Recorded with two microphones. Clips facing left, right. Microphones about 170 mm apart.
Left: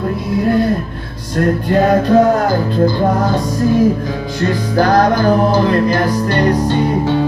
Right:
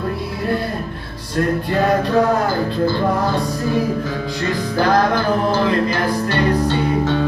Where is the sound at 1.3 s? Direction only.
45° left (ahead or behind).